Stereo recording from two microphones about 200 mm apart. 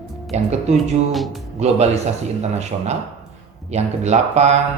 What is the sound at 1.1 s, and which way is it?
Speech, centre (ahead or behind).